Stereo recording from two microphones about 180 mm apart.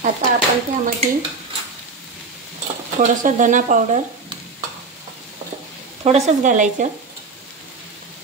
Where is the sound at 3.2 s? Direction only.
45° right (ahead or behind).